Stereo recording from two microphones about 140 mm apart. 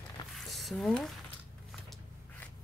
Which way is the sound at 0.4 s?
Centre (ahead or behind).